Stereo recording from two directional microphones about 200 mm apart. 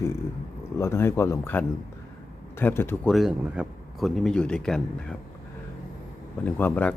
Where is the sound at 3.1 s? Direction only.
5° right (ahead or behind).